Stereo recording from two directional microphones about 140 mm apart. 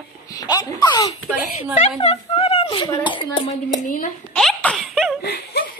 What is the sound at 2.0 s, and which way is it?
Speech, 45° left (ahead or behind).